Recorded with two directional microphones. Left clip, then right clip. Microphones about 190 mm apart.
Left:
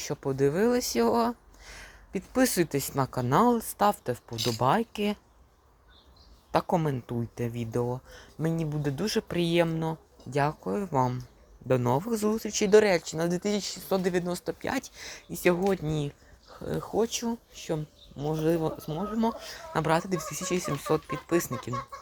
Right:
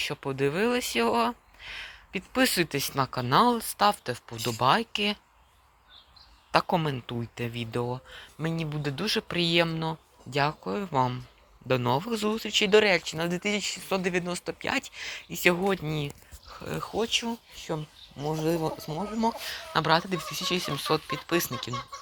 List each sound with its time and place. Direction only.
0.0 s speech: 15° left (ahead or behind)
6.5 s speech: 5° left (ahead or behind)
15.6 s speech: 15° right (ahead or behind)
16.5 s a sound: 5° left (ahead or behind)
17.0 s speech: 10° left (ahead or behind)